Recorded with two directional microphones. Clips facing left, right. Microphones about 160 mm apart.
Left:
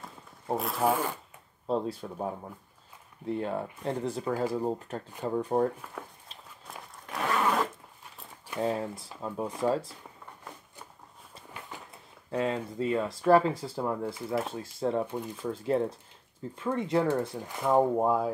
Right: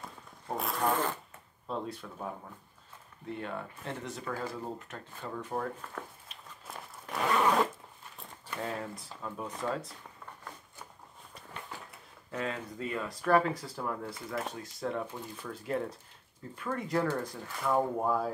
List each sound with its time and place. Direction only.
0.6 s speech: 5° left (ahead or behind)
1.7 s speech: 35° left (ahead or behind)
6.6 s zipper: centre (ahead or behind)
8.5 s speech: 25° left (ahead or behind)
12.3 s speech: 30° left (ahead or behind)